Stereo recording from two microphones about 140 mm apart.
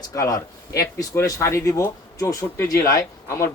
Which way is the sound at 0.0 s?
25° left (ahead or behind).